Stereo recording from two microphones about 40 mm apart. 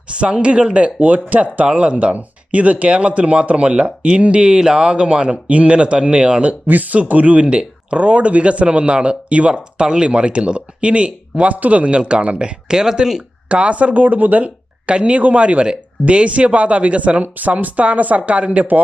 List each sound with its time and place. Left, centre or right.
0.1 s speech: right
6.7 s speech: right; by 13.2 s centre
13.5 s speech: right
14.8 s speech: right